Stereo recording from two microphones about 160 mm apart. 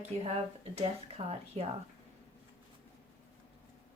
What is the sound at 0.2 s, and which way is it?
A woman's voice, 40° right (ahead or behind).